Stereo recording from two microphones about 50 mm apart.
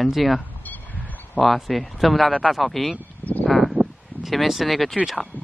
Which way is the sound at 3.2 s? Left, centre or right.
Left.